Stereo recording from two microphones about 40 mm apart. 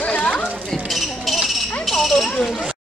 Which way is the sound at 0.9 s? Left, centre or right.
Centre.